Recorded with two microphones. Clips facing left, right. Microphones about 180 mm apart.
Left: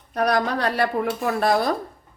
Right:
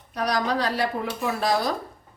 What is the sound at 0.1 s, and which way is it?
Speech, 55° left (ahead or behind).